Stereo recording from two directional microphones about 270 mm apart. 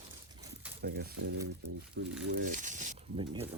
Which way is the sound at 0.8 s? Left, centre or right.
Right.